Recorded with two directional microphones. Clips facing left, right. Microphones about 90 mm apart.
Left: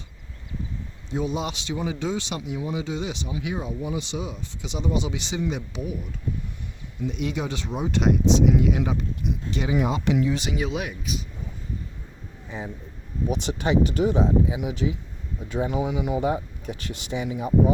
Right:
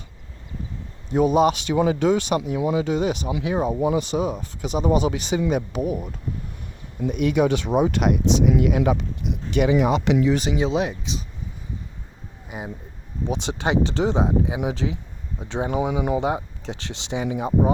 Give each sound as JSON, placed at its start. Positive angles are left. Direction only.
{"t": 1.1, "sound": "speech", "side_deg": -55}
{"t": 7.1, "sound": "speech", "side_deg": -60}
{"t": 10.6, "sound": "speech", "side_deg": -30}
{"t": 13.2, "sound": "speech", "side_deg": -20}
{"t": 13.6, "sound": "speech", "side_deg": -90}
{"t": 15.6, "sound": "speech", "side_deg": -55}
{"t": 16.2, "sound": "speech", "side_deg": -90}
{"t": 17.0, "sound": "speech", "side_deg": -75}